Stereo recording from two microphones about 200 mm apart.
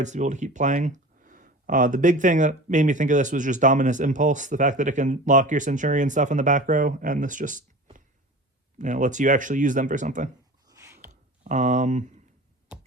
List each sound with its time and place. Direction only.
0.0 s speech: 35° right (ahead or behind)
10.7 s a sound: 15° right (ahead or behind)
11.1 s speech: 35° right (ahead or behind)